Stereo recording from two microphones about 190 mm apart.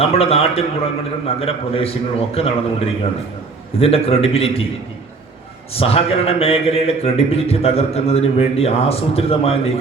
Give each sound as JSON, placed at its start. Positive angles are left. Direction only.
{"t": 0.0, "sound": "a man's voice", "side_deg": 30}
{"t": 5.7, "sound": "a man's voice", "side_deg": 30}